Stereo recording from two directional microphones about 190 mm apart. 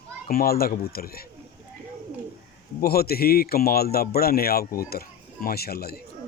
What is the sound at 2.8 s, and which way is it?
Speech, 55° left (ahead or behind).